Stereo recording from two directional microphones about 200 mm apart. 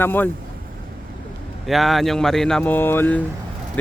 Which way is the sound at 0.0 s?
10° left (ahead or behind).